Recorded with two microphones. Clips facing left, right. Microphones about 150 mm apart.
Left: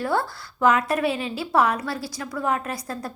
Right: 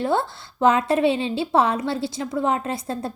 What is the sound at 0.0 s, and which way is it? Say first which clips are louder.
A woman's voice: right 2 dB; 25° right (ahead or behind).